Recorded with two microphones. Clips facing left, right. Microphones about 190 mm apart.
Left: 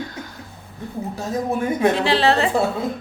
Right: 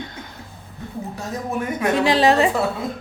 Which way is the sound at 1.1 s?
30° left (ahead or behind).